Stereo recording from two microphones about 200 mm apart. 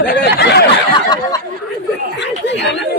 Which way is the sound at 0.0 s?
60° left (ahead or behind).